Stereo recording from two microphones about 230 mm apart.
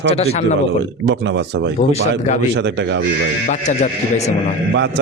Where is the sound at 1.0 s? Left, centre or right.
Right.